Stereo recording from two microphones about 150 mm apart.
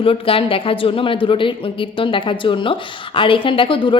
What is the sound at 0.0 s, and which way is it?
A woman's voice, 40° left (ahead or behind).